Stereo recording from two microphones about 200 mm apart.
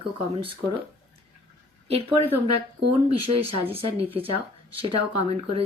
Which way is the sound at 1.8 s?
30° right (ahead or behind).